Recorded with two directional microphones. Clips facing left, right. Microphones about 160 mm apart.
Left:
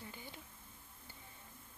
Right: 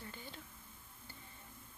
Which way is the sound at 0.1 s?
15° left (ahead or behind).